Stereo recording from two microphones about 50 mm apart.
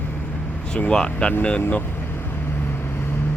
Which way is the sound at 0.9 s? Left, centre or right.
Centre.